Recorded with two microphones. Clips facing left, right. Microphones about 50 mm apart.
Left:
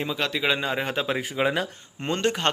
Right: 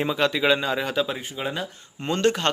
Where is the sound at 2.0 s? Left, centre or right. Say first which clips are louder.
Right 1 dB; left.